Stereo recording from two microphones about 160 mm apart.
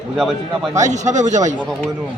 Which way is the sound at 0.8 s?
50° right (ahead or behind).